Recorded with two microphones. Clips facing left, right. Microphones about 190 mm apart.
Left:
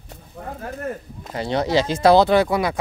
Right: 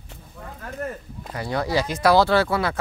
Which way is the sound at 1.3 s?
25° left (ahead or behind).